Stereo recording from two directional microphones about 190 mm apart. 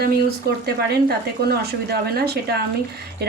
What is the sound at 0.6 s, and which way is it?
Speech, 55° right (ahead or behind).